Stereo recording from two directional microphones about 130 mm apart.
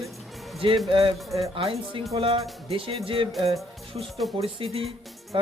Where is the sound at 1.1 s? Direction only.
Centre (ahead or behind).